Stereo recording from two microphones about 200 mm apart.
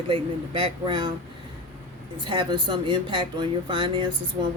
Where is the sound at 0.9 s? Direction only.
25° right (ahead or behind).